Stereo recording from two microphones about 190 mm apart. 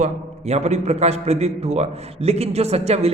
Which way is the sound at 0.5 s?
35° right (ahead or behind).